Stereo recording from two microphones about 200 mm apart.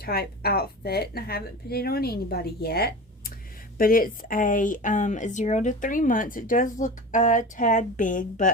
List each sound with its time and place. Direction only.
0.0 s a woman's voice: 50° left (ahead or behind)